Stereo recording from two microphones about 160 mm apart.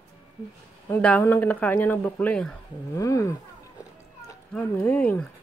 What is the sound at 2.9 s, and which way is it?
Speech, 20° left (ahead or behind).